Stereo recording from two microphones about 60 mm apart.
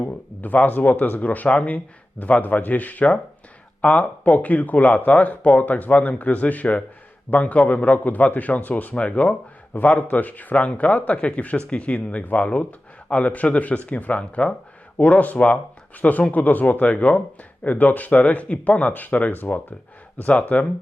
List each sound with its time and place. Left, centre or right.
0.0 s speech: left